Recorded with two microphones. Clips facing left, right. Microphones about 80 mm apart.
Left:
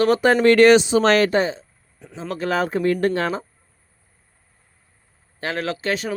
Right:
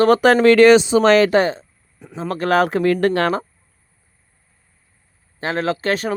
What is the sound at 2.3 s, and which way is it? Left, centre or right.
Speech, right.